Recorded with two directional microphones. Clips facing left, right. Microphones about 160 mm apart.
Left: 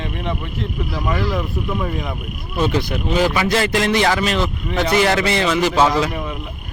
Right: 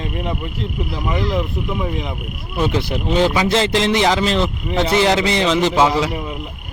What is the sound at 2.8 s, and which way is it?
Speech, 25° right (ahead or behind).